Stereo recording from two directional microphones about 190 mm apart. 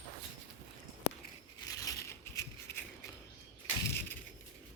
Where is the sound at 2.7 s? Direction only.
10° left (ahead or behind).